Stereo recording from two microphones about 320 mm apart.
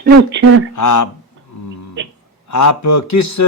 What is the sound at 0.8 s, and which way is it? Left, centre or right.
Speech, left.